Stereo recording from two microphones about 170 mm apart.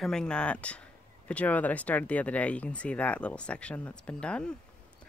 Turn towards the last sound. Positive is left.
turn(degrees=5)  # may be behind; listen again after turning